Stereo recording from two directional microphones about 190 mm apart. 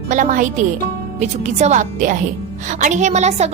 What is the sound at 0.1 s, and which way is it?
A woman's voice, 40° right (ahead or behind).